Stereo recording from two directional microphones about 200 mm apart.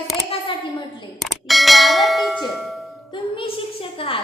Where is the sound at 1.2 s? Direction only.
Centre (ahead or behind).